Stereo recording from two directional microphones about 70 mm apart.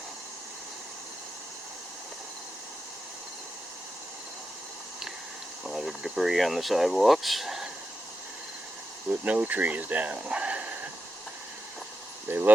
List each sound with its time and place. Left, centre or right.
5.6 s speech: centre
9.2 s speech: right
12.3 s speech: right